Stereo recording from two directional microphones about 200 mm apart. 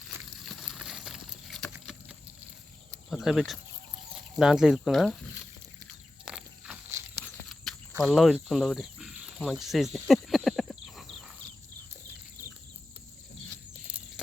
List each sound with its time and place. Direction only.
0.1 s a sound: centre (ahead or behind)
3.1 s speech: centre (ahead or behind)
6.2 s walk: 5° right (ahead or behind)
7.4 s cricket: centre (ahead or behind)